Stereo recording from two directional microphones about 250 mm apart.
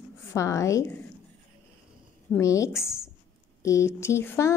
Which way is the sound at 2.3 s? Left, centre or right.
Centre.